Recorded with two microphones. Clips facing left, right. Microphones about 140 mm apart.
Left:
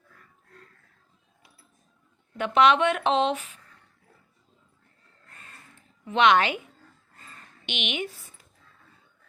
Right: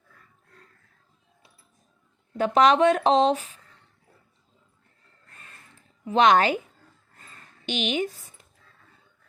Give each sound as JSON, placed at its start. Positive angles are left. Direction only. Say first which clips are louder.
{"t": 2.4, "sound": "speech", "louder": "right 2 dB", "side_deg": -40}
{"t": 6.1, "sound": "speech", "louder": "right 2 dB", "side_deg": -40}
{"t": 7.6, "sound": "speech", "louder": "right 6 dB", "side_deg": -40}